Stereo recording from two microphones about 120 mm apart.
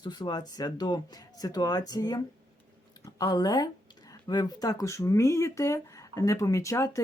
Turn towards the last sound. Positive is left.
turn(degrees=25)  # may be behind; listen again after turning